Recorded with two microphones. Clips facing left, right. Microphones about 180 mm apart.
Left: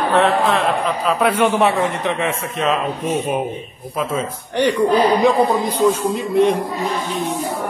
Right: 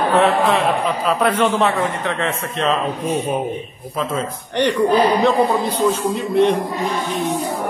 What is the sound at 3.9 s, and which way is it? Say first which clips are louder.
Speech: left 1 dB; 10° left (ahead or behind).